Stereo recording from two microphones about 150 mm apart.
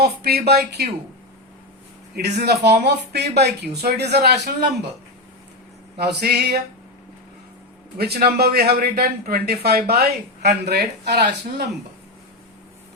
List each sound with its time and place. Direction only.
0.0 s speech: 90° right
2.1 s speech: 90° right
6.0 s speech: 90° right
7.9 s speech: 90° right